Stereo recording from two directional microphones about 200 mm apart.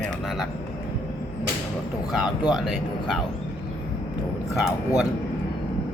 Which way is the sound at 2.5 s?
Centre (ahead or behind).